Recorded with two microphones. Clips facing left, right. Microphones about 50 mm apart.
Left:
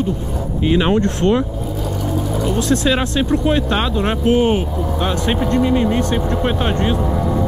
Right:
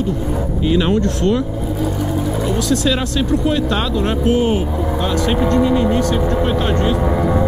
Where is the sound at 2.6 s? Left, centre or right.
Left.